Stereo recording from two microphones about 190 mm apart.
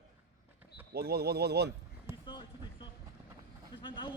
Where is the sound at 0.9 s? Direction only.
55° right (ahead or behind).